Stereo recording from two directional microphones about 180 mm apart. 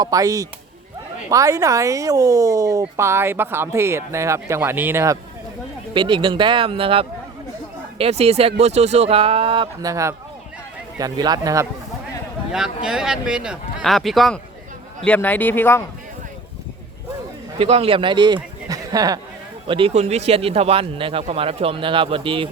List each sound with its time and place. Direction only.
0.0 s speech: 20° right (ahead or behind)
5.9 s a man's voice: 25° right (ahead or behind)
9.9 s speech: 15° right (ahead or behind)
12.5 s a man's voice: 5° right (ahead or behind); by 15.8 s 10° left (ahead or behind)
17.6 s speech: 30° right (ahead or behind)
18.7 s a sound: 20° right (ahead or behind)
19.6 s a man's voice: 30° right (ahead or behind)